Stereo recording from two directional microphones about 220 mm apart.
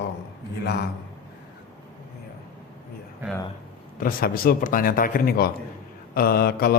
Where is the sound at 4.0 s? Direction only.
40° left (ahead or behind).